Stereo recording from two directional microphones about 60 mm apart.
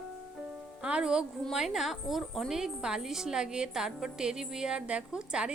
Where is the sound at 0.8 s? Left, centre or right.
Centre.